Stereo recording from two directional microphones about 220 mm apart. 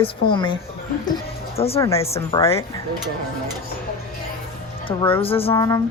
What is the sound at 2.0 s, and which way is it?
Speech, 30° left (ahead or behind).